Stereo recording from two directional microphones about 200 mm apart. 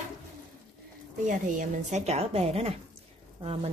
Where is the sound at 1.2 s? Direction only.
40° right (ahead or behind).